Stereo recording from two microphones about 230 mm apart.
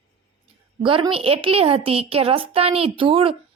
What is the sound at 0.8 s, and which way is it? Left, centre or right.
A woman's voice, right.